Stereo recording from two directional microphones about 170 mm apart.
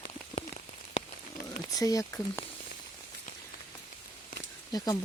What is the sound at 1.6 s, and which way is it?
Speech, 20° left (ahead or behind).